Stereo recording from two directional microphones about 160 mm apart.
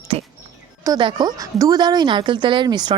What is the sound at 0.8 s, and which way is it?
Speech, 25° right (ahead or behind).